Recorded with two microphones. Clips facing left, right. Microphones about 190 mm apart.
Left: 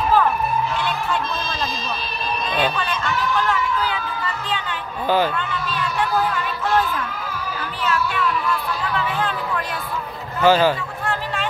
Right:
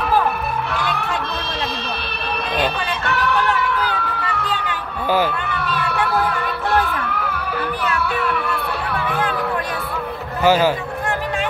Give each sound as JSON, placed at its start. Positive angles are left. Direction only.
{"t": 0.7, "sound": "music", "side_deg": -65}
{"t": 3.1, "sound": "music", "side_deg": -65}
{"t": 5.5, "sound": "a sound", "side_deg": -65}
{"t": 7.8, "sound": "music", "side_deg": -60}
{"t": 10.4, "sound": "a man's voice", "side_deg": -10}